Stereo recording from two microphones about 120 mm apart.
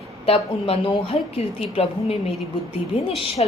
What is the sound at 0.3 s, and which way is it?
A woman's voice, 50° left (ahead or behind).